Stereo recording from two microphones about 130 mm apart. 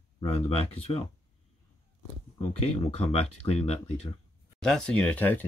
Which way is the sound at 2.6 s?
50° left (ahead or behind).